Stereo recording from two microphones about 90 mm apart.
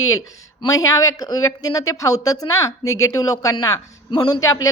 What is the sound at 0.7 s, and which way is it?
A woman's voice, 40° left (ahead or behind).